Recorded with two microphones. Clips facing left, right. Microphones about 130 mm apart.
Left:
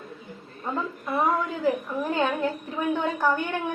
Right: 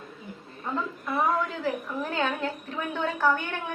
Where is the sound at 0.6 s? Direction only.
15° left (ahead or behind).